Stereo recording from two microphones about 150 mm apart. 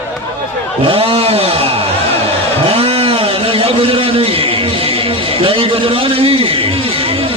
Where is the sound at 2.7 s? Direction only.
40° right (ahead or behind).